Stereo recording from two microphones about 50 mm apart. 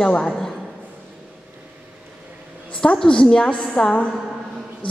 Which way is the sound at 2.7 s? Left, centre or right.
Centre.